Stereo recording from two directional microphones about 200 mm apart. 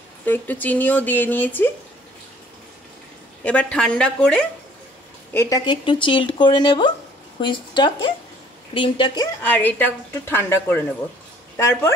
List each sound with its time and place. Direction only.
0.2 s speech: 10° left (ahead or behind)
3.4 s a woman's voice: 5° left (ahead or behind)
5.7 s speech: 25° left (ahead or behind)
9.4 s speech: 10° left (ahead or behind)